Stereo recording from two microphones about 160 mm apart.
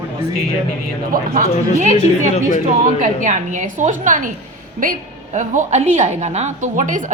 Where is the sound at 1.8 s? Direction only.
50° right (ahead or behind).